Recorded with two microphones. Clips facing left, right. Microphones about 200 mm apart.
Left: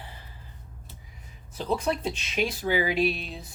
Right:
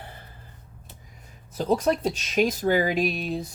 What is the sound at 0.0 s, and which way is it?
Gasp, 55° right (ahead or behind).